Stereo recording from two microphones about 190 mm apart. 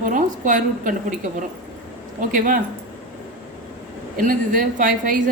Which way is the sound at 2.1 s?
45° right (ahead or behind).